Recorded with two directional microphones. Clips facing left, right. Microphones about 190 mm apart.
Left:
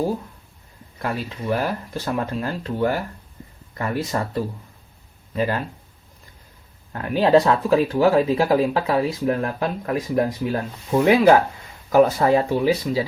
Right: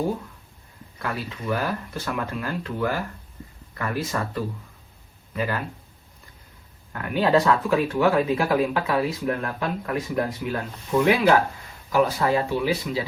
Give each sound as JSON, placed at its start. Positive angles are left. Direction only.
{"t": 0.9, "sound": "speech", "side_deg": 30}
{"t": 6.9, "sound": "speech", "side_deg": 30}